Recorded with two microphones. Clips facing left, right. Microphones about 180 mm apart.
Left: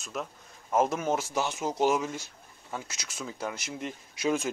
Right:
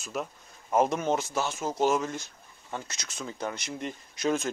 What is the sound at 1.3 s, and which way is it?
Speech, 15° left (ahead or behind).